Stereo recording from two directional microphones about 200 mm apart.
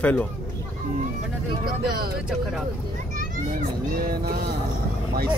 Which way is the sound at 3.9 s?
45° right (ahead or behind).